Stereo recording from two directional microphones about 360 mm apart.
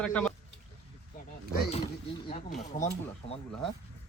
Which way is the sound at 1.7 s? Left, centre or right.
Centre.